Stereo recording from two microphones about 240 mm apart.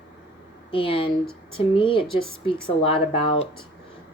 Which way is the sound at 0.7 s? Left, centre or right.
Left.